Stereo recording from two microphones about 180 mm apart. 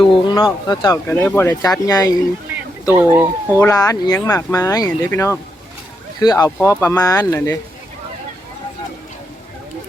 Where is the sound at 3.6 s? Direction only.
20° left (ahead or behind).